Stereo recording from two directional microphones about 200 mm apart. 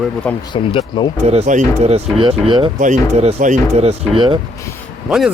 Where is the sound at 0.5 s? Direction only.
25° left (ahead or behind).